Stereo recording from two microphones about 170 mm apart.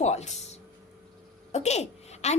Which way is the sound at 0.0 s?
40° left (ahead or behind).